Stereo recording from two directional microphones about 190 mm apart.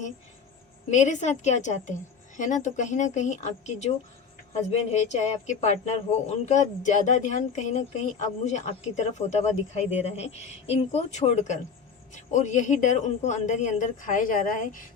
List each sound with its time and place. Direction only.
0.9 s speech: 40° left (ahead or behind)